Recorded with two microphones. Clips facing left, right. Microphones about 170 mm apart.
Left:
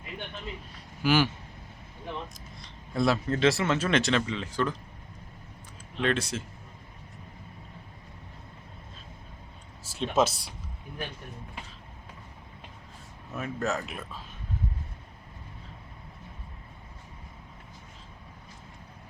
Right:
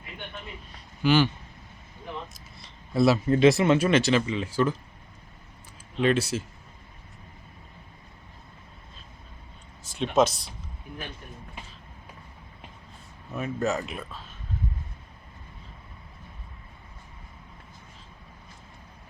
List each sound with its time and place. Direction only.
1.0 s speech: 5° left (ahead or behind)
2.6 s a sound: 5° right (ahead or behind)
3.3 s speech: 15° right (ahead or behind)
3.8 s speech: 5° right (ahead or behind)
6.0 s speech: 5° right (ahead or behind)
9.8 s speech: 5° left (ahead or behind)
13.3 s speech: centre (ahead or behind)